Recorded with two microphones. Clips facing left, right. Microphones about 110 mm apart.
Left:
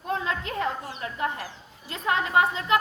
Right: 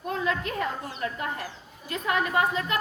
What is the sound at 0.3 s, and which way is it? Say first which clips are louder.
Speech: even; 25° left (ahead or behind).